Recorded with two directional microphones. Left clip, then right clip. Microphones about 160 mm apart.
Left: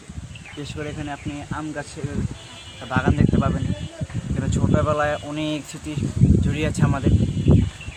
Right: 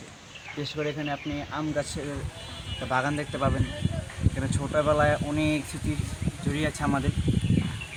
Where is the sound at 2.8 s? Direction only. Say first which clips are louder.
Left 4 dB; 45° right (ahead or behind).